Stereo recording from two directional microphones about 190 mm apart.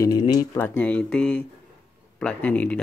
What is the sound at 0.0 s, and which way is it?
Speech, 20° left (ahead or behind).